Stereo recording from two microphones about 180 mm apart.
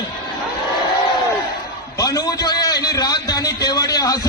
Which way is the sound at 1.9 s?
20° left (ahead or behind).